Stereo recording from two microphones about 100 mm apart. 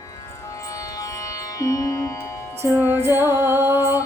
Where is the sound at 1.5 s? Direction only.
30° left (ahead or behind).